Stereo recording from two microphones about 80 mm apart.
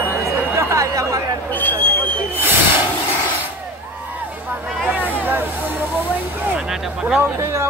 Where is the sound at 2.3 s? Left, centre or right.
Right.